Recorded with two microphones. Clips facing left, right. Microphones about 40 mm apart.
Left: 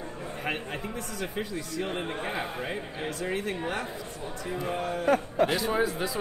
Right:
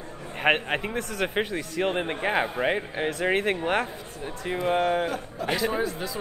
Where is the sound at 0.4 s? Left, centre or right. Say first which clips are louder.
Right 10 dB; right.